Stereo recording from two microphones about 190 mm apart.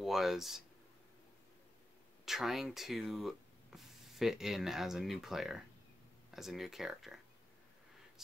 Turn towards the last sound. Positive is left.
turn(degrees=0)  # may be behind; listen again after turning